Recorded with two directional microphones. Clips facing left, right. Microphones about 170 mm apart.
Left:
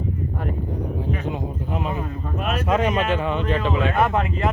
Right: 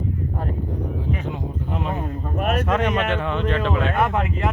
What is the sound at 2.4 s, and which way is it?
Speech, 55° right (ahead or behind).